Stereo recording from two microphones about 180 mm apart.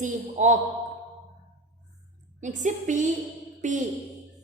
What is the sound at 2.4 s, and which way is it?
A woman's voice, 45° right (ahead or behind).